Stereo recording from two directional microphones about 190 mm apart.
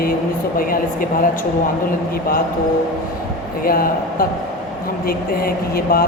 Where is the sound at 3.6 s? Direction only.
50° left (ahead or behind).